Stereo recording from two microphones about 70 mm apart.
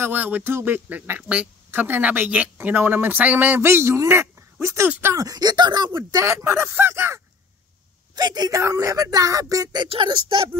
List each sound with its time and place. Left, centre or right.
0.0 s speech: right
3.6 s speech: right
5.1 s speech: right
6.2 s speech: right
8.2 s speech: right
8.5 s speech: right